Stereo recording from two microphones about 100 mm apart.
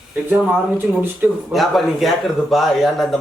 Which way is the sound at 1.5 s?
Centre (ahead or behind).